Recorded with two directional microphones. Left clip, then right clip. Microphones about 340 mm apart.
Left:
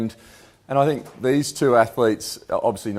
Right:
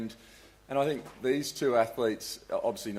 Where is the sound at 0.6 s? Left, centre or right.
Left.